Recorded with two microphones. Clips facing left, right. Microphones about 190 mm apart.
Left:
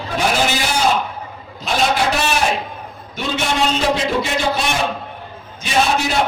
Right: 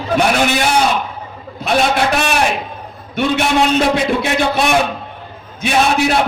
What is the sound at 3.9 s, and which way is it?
Speech, 60° right (ahead or behind).